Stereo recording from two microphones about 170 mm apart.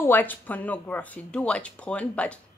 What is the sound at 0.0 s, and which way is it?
Speech, 10° left (ahead or behind).